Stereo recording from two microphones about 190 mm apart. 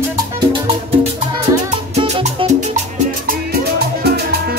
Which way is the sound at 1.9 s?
30° right (ahead or behind).